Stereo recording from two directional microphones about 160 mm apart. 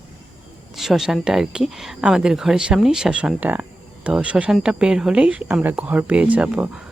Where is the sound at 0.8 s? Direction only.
5° right (ahead or behind).